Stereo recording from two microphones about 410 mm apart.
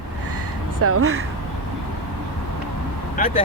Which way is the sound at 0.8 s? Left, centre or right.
Right.